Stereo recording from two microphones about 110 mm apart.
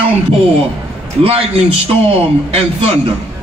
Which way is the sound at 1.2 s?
65° right (ahead or behind).